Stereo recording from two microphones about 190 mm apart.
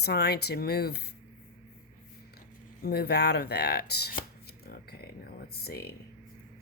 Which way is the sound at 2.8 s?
55° left (ahead or behind).